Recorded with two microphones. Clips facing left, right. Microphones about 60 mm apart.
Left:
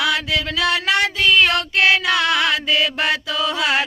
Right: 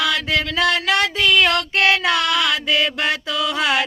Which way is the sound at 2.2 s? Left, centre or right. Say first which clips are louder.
Left 1 dB; left.